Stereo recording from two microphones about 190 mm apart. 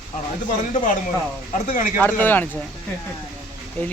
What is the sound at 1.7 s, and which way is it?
Speech, 45° left (ahead or behind).